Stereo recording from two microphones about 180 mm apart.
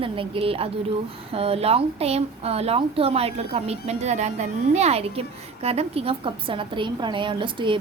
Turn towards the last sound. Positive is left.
turn(degrees=-25)  # may be behind; listen again after turning